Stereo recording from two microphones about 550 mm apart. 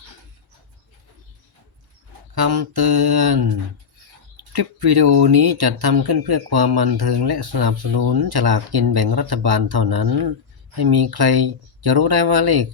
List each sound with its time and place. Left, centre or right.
2.3 s speech: right